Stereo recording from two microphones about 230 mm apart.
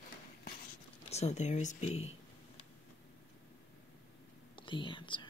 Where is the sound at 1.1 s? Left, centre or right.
Left.